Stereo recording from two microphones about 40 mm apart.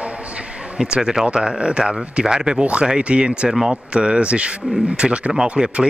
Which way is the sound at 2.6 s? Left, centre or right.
Right.